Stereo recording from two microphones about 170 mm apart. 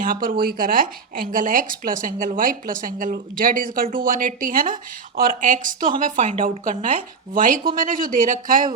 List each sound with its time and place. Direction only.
0.0 s speech: 55° right (ahead or behind)
7.8 s speech: 55° right (ahead or behind)